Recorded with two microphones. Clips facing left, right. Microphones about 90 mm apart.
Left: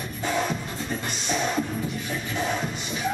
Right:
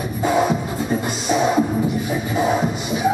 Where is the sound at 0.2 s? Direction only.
10° right (ahead or behind).